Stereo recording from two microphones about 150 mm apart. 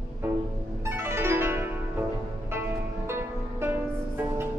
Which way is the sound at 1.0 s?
15° right (ahead or behind).